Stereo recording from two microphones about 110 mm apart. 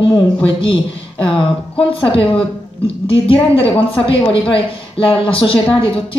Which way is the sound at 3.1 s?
55° left (ahead or behind).